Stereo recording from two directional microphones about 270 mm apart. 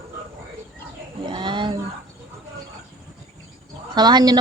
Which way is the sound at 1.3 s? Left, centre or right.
Centre.